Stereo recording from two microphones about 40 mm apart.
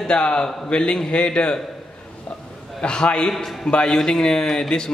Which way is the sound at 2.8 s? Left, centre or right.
Left.